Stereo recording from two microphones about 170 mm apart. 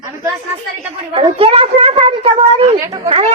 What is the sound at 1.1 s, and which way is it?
A woman's voice, 35° right (ahead or behind).